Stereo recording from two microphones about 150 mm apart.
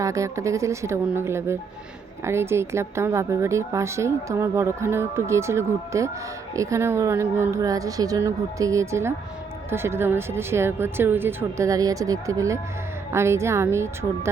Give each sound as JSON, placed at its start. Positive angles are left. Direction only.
{"t": 0.0, "sound": "a woman's voice", "side_deg": -20}